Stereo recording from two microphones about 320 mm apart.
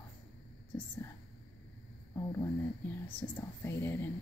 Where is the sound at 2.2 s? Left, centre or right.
Centre.